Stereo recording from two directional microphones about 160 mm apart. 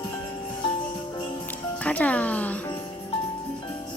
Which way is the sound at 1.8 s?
10° left (ahead or behind).